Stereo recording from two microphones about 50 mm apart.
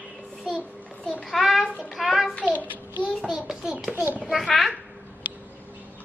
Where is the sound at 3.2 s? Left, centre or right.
Centre.